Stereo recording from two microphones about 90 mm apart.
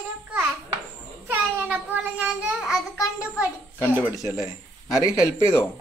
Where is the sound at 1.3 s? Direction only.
20° right (ahead or behind).